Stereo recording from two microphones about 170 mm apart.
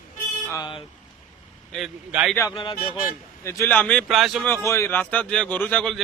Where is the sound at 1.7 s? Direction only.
5° right (ahead or behind).